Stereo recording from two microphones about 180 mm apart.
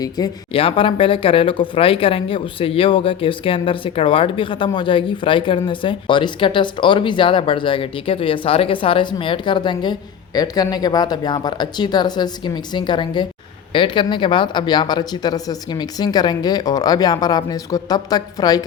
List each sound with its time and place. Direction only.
0.0 s speech: 25° left (ahead or behind)